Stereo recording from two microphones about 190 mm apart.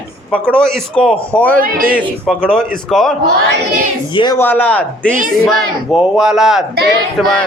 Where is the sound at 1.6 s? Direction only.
50° right (ahead or behind).